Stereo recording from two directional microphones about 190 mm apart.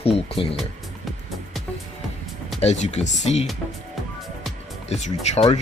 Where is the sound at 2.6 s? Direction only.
35° left (ahead or behind).